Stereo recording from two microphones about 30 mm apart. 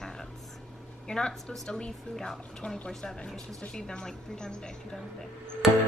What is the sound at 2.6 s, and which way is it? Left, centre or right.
Speech, left.